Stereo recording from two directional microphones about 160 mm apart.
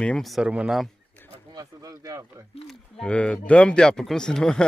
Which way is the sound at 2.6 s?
5° left (ahead or behind).